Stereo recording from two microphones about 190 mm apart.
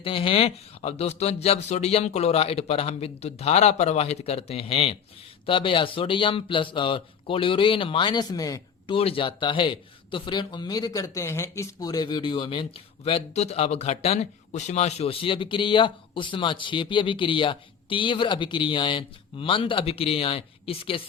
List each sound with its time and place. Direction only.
0.0 s a man's voice: 25° left (ahead or behind)
9.0 s a man's voice: 30° left (ahead or behind)